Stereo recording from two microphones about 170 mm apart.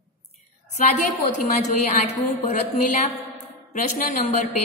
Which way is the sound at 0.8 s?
45° left (ahead or behind).